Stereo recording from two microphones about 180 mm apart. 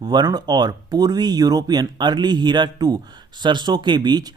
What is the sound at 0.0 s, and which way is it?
Speech, 25° right (ahead or behind).